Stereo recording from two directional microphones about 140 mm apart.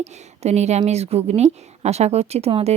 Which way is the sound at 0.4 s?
50° right (ahead or behind).